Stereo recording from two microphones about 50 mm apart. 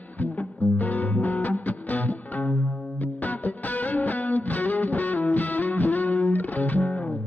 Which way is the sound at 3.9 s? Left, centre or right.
Left.